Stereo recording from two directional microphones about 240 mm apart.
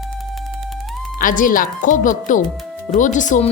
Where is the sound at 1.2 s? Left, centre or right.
Left.